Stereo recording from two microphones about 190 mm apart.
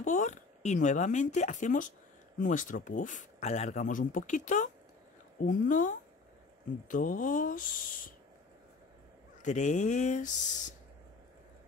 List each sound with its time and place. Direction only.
0.0 s speech: 40° left (ahead or behind)
9.4 s speech: 40° left (ahead or behind)